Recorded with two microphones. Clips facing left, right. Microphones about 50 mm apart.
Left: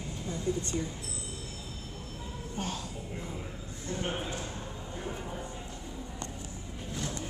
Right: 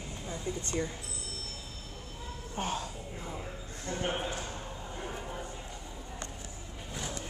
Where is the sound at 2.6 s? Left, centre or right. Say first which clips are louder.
Right 3 dB; right.